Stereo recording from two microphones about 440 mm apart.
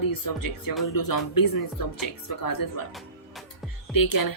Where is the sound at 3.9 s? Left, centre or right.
Left.